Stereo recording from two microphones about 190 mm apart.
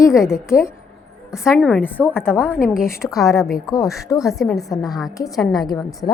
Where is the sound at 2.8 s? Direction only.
15° left (ahead or behind).